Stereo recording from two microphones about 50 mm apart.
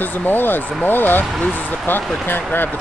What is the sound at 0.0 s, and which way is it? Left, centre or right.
Speech, left.